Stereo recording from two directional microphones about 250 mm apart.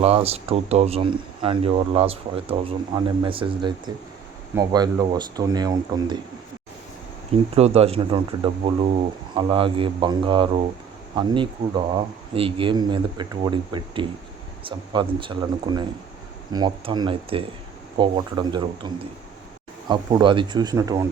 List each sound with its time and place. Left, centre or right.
0.0 s speech: right
7.5 s speech: right
19.9 s speech: centre